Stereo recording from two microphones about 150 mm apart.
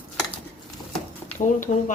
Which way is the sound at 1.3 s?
60° left (ahead or behind).